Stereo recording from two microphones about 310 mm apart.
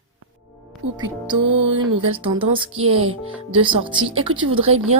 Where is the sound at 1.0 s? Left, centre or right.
Centre.